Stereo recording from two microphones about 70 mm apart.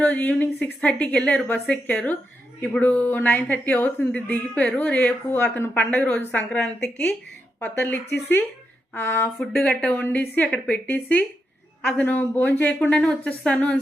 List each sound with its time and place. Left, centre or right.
0.0 s a woman's voice: centre
2.8 s a woman's voice: left
7.6 s a woman's voice: left
9.4 s speech: centre
9.9 s a woman's voice: left